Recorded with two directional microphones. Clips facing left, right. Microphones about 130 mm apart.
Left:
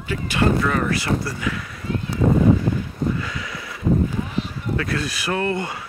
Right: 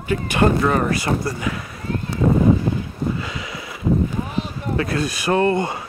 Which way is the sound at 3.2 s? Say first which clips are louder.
Right 1 dB; 20° right (ahead or behind).